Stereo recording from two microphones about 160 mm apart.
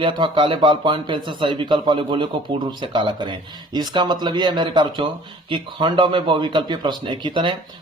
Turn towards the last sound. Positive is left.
turn(degrees=-30)  # may be behind; listen again after turning